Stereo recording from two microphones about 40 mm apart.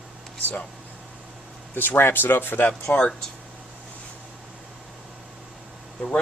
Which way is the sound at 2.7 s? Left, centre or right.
Left.